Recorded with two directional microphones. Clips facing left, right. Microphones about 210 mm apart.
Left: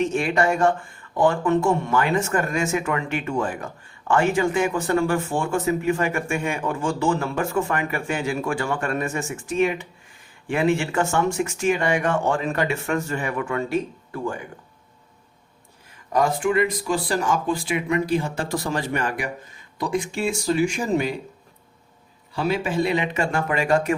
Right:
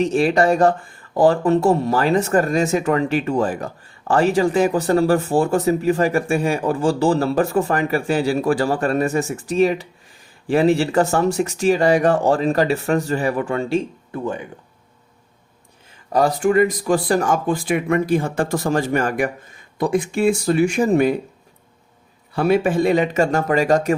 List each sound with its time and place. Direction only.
0.0 s speech: 35° right (ahead or behind)
16.1 s speech: 40° right (ahead or behind); by 21.2 s 55° right (ahead or behind)
22.4 s speech: 55° right (ahead or behind); by 23.9 s 40° right (ahead or behind)